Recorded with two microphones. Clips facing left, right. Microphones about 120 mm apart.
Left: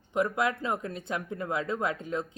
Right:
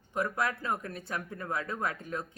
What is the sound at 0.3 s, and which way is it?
Speech, 20° left (ahead or behind).